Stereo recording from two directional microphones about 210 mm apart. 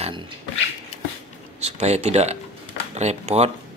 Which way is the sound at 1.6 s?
30° right (ahead or behind).